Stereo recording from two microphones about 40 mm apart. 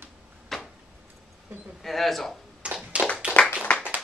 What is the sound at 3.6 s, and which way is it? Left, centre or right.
Clapping, left.